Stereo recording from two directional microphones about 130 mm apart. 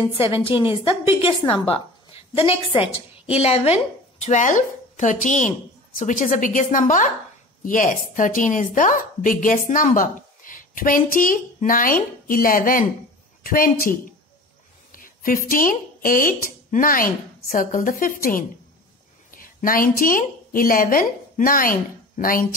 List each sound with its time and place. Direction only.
0.2 s a woman's voice: 45° left (ahead or behind); by 7.1 s 75° left (ahead or behind)
7.6 s a woman's voice: 90° left